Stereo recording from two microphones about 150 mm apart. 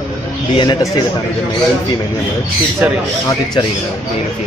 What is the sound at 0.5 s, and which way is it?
Speech, 30° left (ahead or behind).